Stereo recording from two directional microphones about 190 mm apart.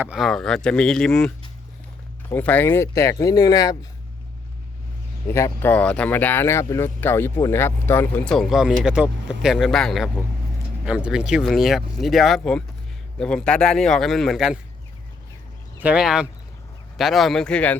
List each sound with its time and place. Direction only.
0.0 s speech: 5° right (ahead or behind)
2.3 s speech: 10° left (ahead or behind)
5.3 s speech: 10° left (ahead or behind)
15.8 s speech: 5° right (ahead or behind)